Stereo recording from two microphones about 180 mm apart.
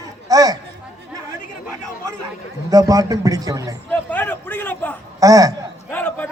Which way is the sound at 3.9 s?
10° left (ahead or behind).